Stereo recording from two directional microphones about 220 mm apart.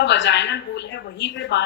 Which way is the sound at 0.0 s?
50° left (ahead or behind).